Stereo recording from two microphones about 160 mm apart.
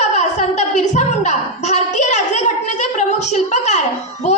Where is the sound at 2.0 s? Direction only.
45° left (ahead or behind).